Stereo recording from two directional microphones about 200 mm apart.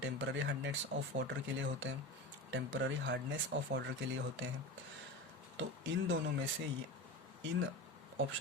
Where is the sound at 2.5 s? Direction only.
70° right (ahead or behind).